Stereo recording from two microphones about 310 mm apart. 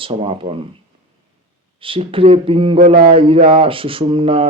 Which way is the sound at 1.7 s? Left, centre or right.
Centre.